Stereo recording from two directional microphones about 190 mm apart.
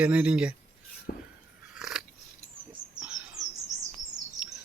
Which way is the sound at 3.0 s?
5° right (ahead or behind).